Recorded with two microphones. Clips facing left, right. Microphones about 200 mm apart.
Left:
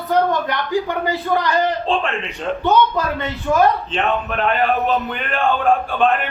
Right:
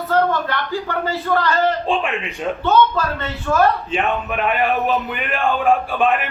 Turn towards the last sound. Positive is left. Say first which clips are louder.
# left 1 dB
turn(degrees=-5)  # may be behind; listen again after turning